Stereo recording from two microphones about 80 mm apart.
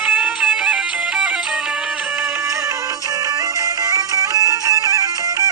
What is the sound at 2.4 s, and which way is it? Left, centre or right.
Music, right.